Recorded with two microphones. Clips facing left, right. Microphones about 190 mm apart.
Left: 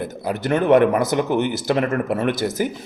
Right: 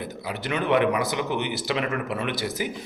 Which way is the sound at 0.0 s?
50° left (ahead or behind).